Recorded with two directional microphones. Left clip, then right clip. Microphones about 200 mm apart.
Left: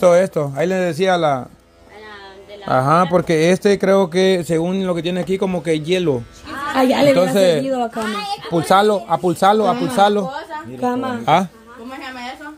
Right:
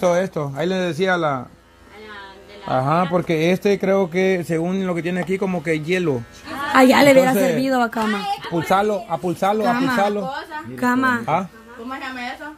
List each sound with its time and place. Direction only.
0.0 s speech: 25° left (ahead or behind)
2.7 s speech: 15° left (ahead or behind)
6.7 s a woman's voice: 45° right (ahead or behind)
7.3 s speech: 25° left (ahead or behind)
7.6 s a woman's voice: 50° right (ahead or behind)
8.5 s speech: 25° left (ahead or behind)
10.8 s speech: 60° right (ahead or behind)